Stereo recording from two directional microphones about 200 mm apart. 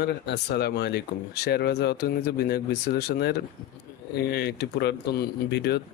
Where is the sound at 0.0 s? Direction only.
55° left (ahead or behind).